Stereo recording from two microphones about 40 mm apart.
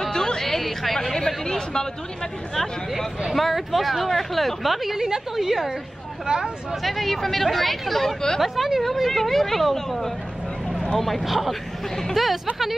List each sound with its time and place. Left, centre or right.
0.0 s music: centre
1.1 s a sound: centre
3.3 s speech: centre